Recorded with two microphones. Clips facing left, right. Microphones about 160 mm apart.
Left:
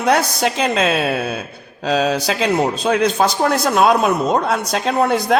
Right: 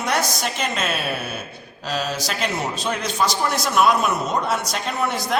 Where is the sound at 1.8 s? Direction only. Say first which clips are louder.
Left 9 dB; 75° left (ahead or behind).